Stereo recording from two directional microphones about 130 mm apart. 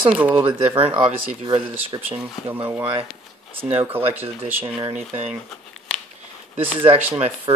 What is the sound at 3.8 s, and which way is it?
Speech, 15° right (ahead or behind).